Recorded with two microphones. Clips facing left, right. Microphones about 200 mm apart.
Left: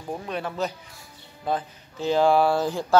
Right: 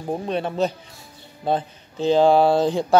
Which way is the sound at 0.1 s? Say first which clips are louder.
Right 6 dB; 25° right (ahead or behind).